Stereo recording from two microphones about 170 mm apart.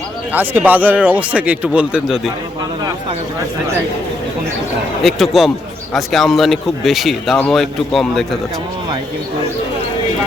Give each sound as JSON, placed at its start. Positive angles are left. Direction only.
{"t": 0.3, "sound": "speech", "side_deg": -10}
{"t": 5.0, "sound": "speech", "side_deg": 0}